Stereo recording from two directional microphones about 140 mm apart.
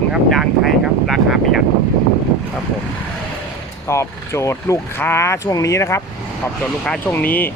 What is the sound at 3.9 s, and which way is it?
Speech, 20° left (ahead or behind).